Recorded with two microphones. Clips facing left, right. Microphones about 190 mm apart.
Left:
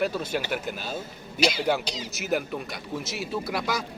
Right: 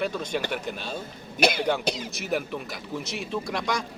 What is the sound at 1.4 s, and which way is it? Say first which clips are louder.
Speech: right 1 dB; 55° right (ahead or behind).